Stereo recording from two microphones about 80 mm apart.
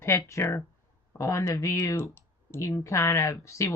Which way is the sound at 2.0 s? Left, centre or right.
Left.